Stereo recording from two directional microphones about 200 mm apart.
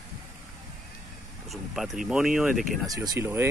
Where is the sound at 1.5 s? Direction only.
Centre (ahead or behind).